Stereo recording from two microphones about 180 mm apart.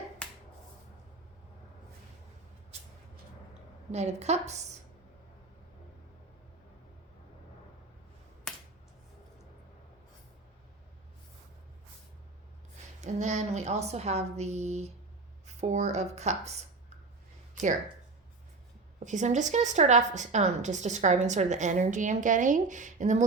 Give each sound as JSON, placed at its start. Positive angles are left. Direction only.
{"t": 3.9, "sound": "a woman's voice", "side_deg": -40}
{"t": 13.0, "sound": "a woman's voice", "side_deg": -40}
{"t": 17.5, "sound": "a sound", "side_deg": -45}
{"t": 19.0, "sound": "a woman's voice", "side_deg": -40}